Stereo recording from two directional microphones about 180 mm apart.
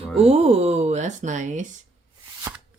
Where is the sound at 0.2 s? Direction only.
35° right (ahead or behind).